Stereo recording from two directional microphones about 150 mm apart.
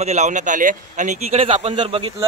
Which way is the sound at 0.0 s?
50° right (ahead or behind).